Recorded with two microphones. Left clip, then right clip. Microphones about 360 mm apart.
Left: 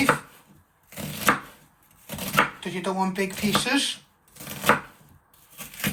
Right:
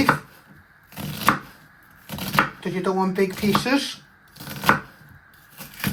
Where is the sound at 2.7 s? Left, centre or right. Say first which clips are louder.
Right 4 dB; right.